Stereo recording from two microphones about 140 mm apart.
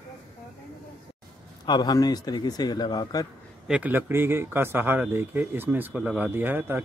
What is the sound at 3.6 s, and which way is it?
A man's voice, 10° right (ahead or behind).